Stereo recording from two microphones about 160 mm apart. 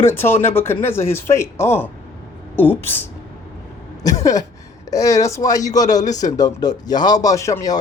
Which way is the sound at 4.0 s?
20° left (ahead or behind).